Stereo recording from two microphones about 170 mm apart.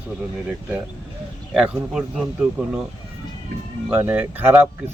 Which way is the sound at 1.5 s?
5° right (ahead or behind).